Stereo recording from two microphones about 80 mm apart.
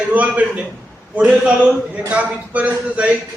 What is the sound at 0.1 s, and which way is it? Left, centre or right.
A man's voice, centre.